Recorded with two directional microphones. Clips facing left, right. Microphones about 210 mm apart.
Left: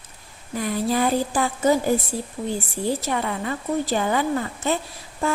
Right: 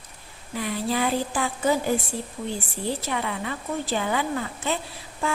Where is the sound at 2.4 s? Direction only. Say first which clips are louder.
Left 4 dB; 30° left (ahead or behind).